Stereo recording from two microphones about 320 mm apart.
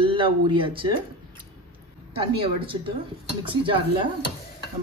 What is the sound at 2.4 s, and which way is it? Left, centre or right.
A man's voice, centre.